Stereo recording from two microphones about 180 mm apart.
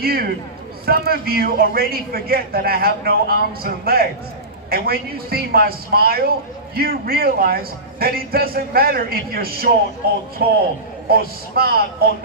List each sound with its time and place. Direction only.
0.0 s a man's voice: 55° right (ahead or behind)